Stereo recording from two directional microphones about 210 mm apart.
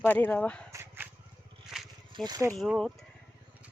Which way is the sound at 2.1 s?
20° right (ahead or behind).